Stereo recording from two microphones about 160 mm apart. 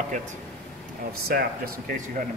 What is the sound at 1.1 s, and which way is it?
Speech, 75° right (ahead or behind).